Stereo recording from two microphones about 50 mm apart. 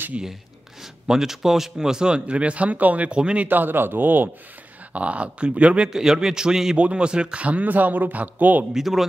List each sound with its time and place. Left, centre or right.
1.0 s a man's voice: centre; by 3.2 s right
3.2 s speech: centre
3.4 s speech: right
4.9 s speech: right
5.9 s a man's voice: centre
6.8 s speech: right
8.7 s speech: centre